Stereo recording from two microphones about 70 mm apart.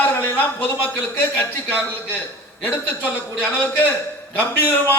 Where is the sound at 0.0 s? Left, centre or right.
Left.